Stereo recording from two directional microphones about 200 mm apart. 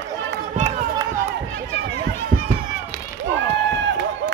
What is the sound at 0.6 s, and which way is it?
Run, 35° right (ahead or behind).